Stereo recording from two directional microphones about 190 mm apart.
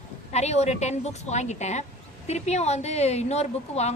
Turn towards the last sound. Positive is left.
turn(degrees=35)  # may be behind; listen again after turning